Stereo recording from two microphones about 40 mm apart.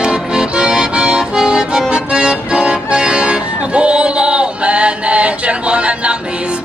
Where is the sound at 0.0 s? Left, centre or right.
Right.